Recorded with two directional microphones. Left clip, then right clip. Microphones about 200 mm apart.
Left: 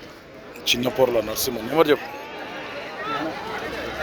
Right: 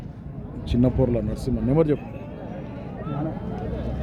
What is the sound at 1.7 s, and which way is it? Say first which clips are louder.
Speech: left 4 dB; 20° left (ahead or behind).